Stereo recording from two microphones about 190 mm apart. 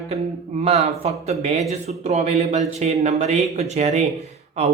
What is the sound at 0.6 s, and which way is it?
A man's voice, 35° right (ahead or behind).